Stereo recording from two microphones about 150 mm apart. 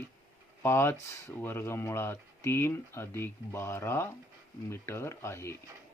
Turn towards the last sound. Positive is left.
turn(degrees=20)  # may be behind; listen again after turning